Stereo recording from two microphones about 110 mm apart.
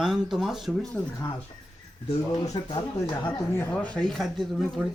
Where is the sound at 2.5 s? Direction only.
40° left (ahead or behind).